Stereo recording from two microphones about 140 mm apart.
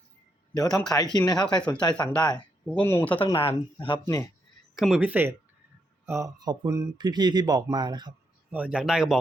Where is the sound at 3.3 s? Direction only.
40° left (ahead or behind).